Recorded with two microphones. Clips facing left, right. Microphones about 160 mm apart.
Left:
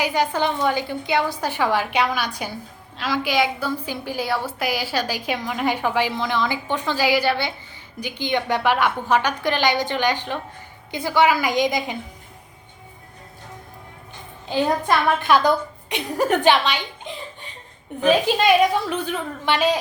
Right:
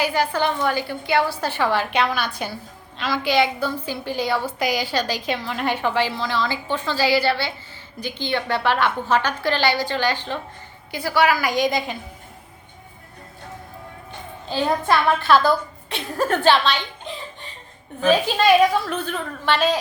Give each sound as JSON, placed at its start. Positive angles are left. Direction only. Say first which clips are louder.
{"t": 0.0, "sound": "a woman's voice", "louder": "even", "side_deg": 20}
{"t": 14.5, "sound": "a woman's voice", "louder": "even", "side_deg": 15}